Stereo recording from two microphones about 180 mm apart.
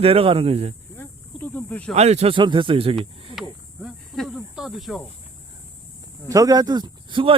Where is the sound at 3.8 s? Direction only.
5° right (ahead or behind).